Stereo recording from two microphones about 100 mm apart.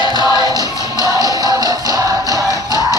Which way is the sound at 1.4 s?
40° right (ahead or behind).